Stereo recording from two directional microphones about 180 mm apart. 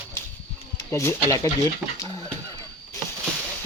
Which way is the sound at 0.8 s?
15° left (ahead or behind).